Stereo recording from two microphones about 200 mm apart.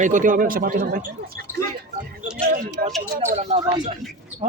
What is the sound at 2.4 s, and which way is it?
Gargling, 45° right (ahead or behind).